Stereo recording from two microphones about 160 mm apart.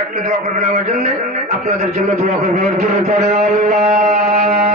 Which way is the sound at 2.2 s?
50° right (ahead or behind).